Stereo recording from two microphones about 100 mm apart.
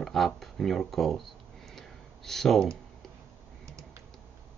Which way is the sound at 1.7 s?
5° left (ahead or behind).